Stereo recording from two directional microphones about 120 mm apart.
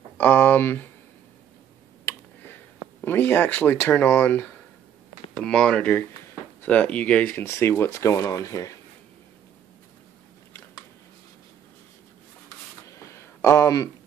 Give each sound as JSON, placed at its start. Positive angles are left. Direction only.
{"t": 0.2, "sound": "speech", "side_deg": 15}
{"t": 3.0, "sound": "speech", "side_deg": 15}
{"t": 12.8, "sound": "a sound", "side_deg": 25}